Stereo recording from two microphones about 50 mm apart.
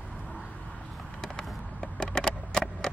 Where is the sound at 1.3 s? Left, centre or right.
Centre.